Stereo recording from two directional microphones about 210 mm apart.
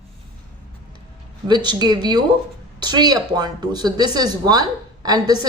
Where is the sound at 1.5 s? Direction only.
20° right (ahead or behind).